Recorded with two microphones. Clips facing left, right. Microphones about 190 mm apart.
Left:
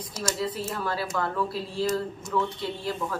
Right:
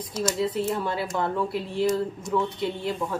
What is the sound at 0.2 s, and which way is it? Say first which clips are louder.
Speech: right 5 dB; 25° right (ahead or behind).